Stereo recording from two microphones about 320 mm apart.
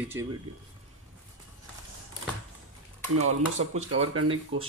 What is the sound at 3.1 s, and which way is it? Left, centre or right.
Speech, right.